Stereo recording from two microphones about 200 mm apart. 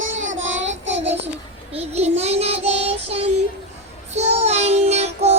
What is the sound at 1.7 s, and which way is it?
Child singing, 30° right (ahead or behind).